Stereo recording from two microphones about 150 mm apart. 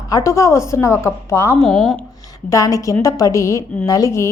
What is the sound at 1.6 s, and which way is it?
Speech, 5° left (ahead or behind).